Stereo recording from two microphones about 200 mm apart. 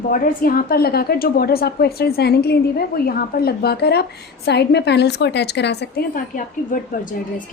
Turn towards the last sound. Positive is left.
turn(degrees=40)  # may be behind; listen again after turning